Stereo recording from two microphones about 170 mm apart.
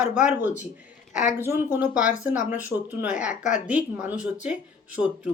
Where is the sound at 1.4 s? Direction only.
10° right (ahead or behind).